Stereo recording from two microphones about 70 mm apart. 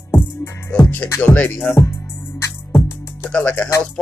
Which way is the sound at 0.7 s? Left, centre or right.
Left.